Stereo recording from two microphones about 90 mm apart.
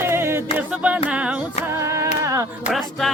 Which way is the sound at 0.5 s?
15° right (ahead or behind).